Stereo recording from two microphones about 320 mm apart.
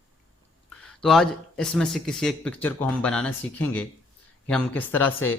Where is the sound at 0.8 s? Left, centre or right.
Centre.